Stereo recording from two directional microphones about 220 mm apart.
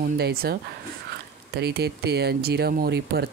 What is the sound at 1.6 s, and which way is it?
Speech, 50° right (ahead or behind).